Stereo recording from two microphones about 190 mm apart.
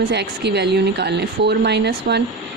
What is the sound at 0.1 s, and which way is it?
Speech, 60° right (ahead or behind).